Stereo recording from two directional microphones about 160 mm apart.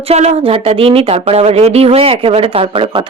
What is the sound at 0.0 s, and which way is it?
Speech, 40° right (ahead or behind).